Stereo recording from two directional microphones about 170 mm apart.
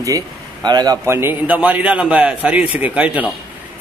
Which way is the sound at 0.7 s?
25° right (ahead or behind).